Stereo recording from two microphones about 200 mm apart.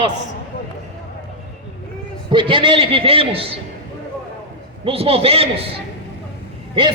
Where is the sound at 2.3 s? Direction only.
25° right (ahead or behind).